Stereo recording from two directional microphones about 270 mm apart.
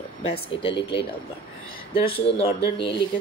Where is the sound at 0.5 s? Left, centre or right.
Centre.